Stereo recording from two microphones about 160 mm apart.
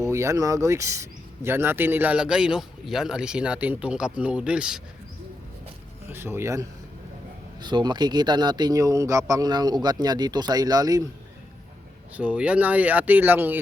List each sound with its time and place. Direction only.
0.0 s a man's voice: 15° right (ahead or behind)
6.1 s a man's voice: 15° right (ahead or behind)
12.1 s a man's voice: 10° right (ahead or behind)